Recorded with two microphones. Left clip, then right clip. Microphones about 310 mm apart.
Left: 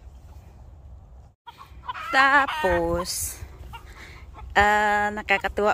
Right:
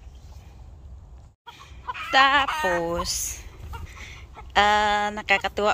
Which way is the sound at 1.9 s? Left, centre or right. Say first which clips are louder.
Even; centre.